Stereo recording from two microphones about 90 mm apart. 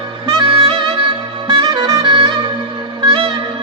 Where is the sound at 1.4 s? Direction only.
50° right (ahead or behind).